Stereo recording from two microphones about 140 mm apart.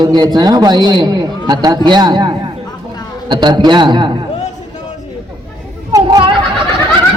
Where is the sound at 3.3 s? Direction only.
35° right (ahead or behind).